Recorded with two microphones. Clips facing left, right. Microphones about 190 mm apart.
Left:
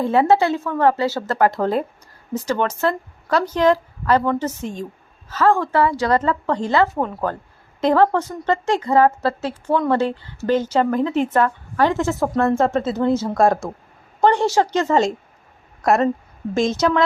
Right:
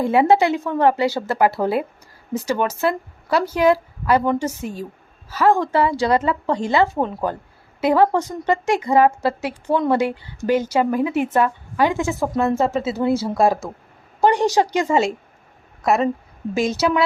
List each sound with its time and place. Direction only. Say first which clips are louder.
0.0 s a woman's voice: right 1 dB; 15° right (ahead or behind)